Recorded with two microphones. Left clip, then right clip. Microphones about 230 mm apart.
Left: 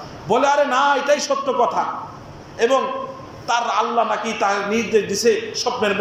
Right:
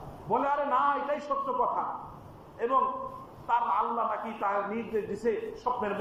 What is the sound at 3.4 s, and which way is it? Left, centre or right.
A man's voice, left.